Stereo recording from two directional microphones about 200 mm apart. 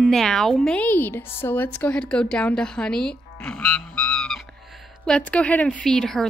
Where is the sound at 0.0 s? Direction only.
Centre (ahead or behind).